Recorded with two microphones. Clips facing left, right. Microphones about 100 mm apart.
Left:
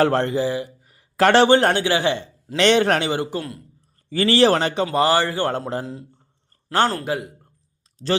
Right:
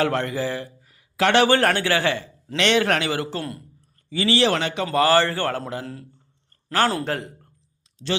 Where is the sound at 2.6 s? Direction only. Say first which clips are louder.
Left 3 dB; 35° left (ahead or behind); by 3.4 s 15° left (ahead or behind).